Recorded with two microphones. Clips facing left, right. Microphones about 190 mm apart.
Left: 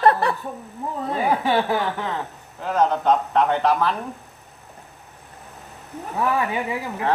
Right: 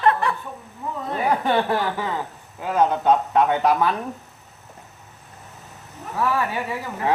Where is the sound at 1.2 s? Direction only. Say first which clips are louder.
Right 1 dB; centre (ahead or behind).